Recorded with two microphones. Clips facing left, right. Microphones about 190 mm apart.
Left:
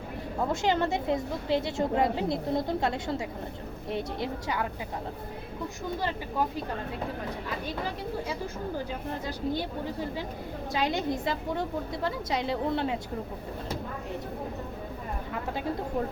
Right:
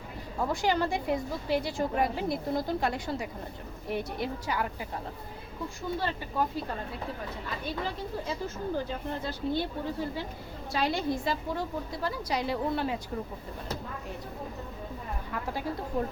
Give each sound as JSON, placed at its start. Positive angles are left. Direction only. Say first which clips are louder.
{"t": 0.4, "sound": "a woman's voice", "louder": "left 1 dB", "side_deg": 20}
{"t": 9.2, "sound": "a woman's voice", "louder": "even", "side_deg": 15}
{"t": 10.7, "sound": "a woman's voice", "louder": "even", "side_deg": 20}